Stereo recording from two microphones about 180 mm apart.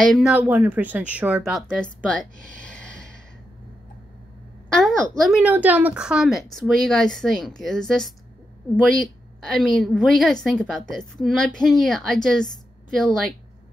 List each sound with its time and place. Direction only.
0.1 s a woman's voice: 5° right (ahead or behind)
2.7 s gasp: 5° left (ahead or behind)
4.7 s a woman's voice: 5° left (ahead or behind)